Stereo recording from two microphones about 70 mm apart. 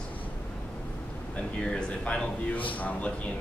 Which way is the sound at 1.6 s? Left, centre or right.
Centre.